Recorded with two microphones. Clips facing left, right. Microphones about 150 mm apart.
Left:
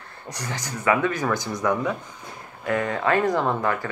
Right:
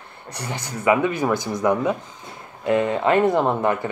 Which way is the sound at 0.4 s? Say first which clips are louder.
Right 3 dB; 20° right (ahead or behind).